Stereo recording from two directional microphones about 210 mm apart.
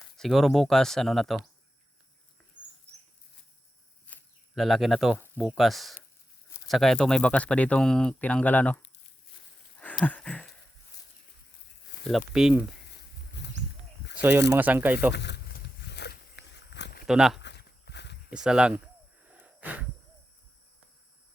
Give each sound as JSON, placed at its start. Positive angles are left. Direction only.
{"t": 0.2, "sound": "speech", "side_deg": 0}
{"t": 4.0, "sound": "a sound", "side_deg": 5}
{"t": 5.4, "sound": "speech", "side_deg": 0}
{"t": 9.8, "sound": "a sound", "side_deg": 5}
{"t": 12.0, "sound": "speech", "side_deg": 0}
{"t": 12.9, "sound": "a sound", "side_deg": 55}
{"t": 14.2, "sound": "speech", "side_deg": -10}
{"t": 15.1, "sound": "wild animals", "side_deg": 55}
{"t": 17.1, "sound": "speech", "side_deg": 0}
{"t": 17.4, "sound": "a sound", "side_deg": 55}
{"t": 18.3, "sound": "speech", "side_deg": -5}
{"t": 19.2, "sound": "wheeze", "side_deg": -5}